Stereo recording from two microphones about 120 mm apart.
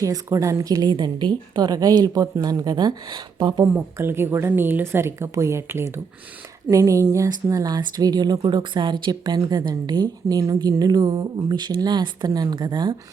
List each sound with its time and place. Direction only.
0.0 s speech: 30° right (ahead or behind)
3.6 s speech: 20° right (ahead or behind); by 13.0 s 40° right (ahead or behind)